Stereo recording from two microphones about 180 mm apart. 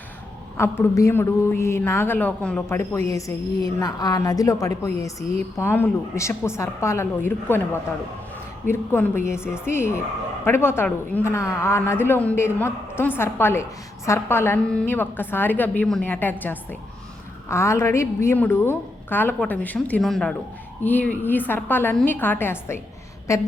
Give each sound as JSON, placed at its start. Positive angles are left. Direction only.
{"t": 0.5, "sound": "a woman's voice", "side_deg": 15}